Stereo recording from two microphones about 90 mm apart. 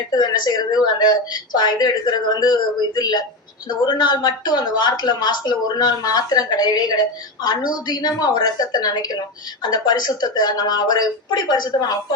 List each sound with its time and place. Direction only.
0.1 s a woman's voice: 50° left (ahead or behind)